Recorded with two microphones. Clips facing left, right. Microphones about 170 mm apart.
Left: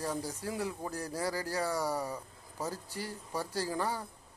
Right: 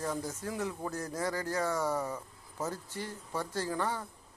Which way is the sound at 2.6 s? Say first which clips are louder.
Even; 35° left (ahead or behind).